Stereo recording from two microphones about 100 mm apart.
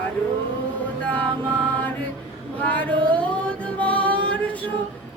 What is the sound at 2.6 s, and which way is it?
Music, 15° left (ahead or behind).